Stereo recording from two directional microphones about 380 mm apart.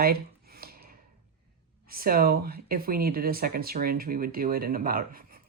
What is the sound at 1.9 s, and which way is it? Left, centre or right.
Speech, right.